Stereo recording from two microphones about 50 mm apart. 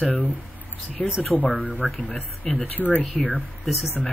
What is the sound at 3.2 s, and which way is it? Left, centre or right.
Speech, centre.